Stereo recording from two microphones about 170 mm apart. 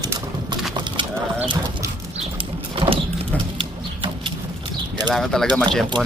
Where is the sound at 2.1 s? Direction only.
30° right (ahead or behind).